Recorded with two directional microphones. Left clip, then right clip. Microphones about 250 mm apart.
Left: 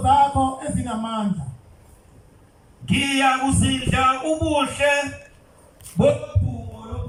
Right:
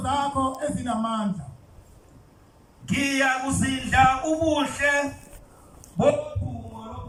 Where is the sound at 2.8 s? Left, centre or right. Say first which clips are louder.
Left 4 dB; left.